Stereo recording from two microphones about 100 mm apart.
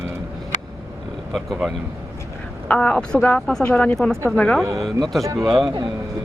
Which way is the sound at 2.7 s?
15° left (ahead or behind).